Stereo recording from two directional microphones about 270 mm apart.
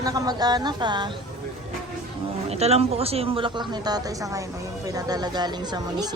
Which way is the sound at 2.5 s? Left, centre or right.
Right.